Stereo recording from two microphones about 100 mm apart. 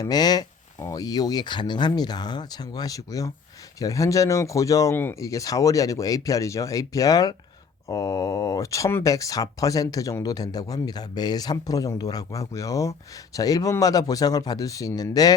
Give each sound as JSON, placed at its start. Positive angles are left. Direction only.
{"t": 0.0, "sound": "speech", "side_deg": 40}